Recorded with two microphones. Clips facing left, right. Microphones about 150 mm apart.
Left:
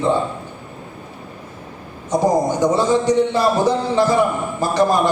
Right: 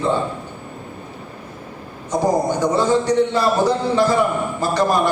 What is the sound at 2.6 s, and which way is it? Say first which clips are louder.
A man's voice: left 1 dB; 15° left (ahead or behind).